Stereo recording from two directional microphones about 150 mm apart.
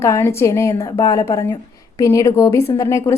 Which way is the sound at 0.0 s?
15° left (ahead or behind).